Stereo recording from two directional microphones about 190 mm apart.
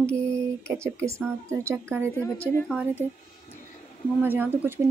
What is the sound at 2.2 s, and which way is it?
Speech, 10° left (ahead or behind).